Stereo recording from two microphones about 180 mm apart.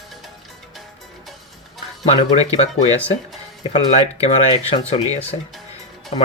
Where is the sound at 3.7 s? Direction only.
35° left (ahead or behind).